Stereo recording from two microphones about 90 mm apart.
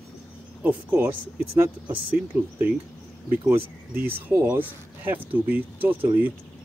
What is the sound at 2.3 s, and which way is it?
Speech, 15° right (ahead or behind).